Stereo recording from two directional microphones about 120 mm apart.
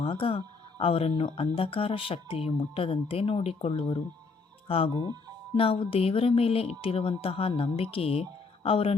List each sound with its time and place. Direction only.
0.0 s speech: 50° left (ahead or behind)